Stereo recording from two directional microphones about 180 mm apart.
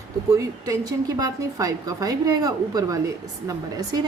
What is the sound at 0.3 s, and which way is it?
A woman's voice, 20° right (ahead or behind).